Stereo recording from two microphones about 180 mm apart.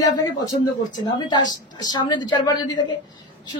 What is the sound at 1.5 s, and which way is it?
Speech, 25° left (ahead or behind).